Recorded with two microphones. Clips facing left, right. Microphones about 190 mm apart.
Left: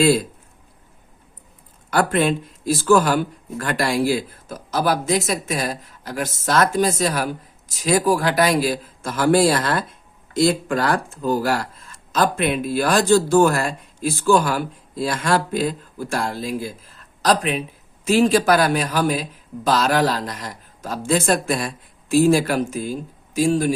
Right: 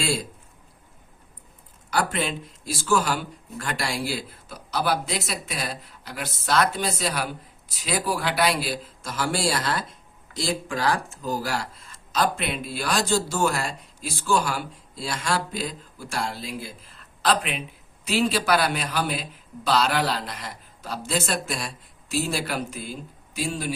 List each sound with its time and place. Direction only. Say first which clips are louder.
1.9 s speech: left 7 dB; 55° left (ahead or behind)